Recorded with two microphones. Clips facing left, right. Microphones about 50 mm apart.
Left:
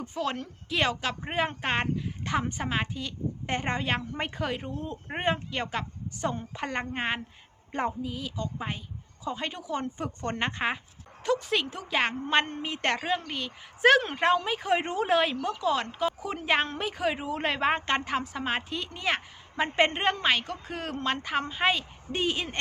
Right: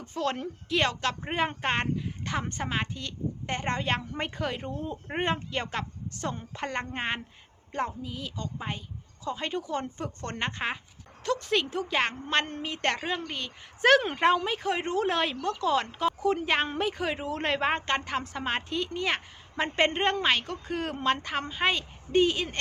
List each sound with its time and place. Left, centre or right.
0.0 s a woman's voice: centre
7.7 s a woman's voice: centre
8.0 s a woman's voice: centre
10.0 s a woman's voice: centre
15.0 s a woman's voice: centre